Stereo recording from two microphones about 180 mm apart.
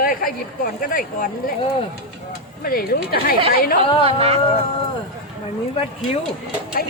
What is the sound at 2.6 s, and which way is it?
Speech, 55° left (ahead or behind).